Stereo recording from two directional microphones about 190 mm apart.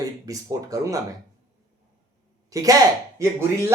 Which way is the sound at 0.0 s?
20° right (ahead or behind).